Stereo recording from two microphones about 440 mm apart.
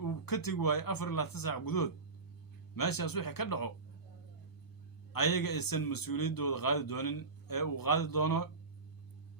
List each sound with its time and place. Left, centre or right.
0.0 s a man's voice: left
5.1 s a man's voice: left